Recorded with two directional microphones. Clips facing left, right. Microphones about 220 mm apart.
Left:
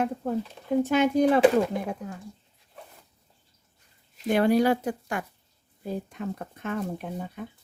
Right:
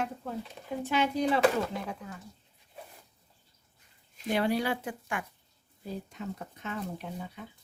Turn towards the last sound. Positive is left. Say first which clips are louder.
# left 5 dB
turn(degrees=50)  # may be behind; listen again after turning